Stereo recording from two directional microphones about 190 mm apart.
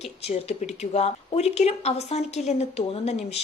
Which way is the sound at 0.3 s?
35° left (ahead or behind).